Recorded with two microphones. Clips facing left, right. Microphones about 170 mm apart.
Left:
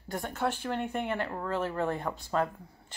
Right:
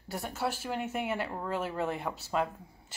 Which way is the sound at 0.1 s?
5° right (ahead or behind).